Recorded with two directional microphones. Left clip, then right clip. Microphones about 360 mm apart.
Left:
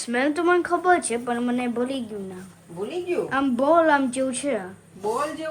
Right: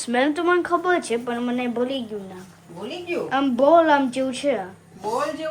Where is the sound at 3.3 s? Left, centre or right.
Centre.